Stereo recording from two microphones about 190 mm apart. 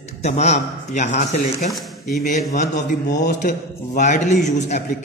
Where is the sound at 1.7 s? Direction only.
Centre (ahead or behind).